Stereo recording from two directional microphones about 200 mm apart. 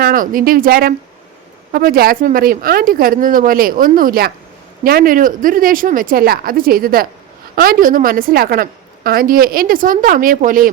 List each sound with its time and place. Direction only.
0.0 s a woman's voice: 45° right (ahead or behind)